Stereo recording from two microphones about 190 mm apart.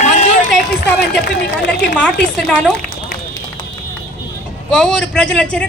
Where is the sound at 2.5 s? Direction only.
Centre (ahead or behind).